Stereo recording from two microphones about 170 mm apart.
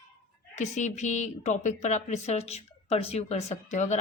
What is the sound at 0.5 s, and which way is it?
A woman's voice, 45° left (ahead or behind).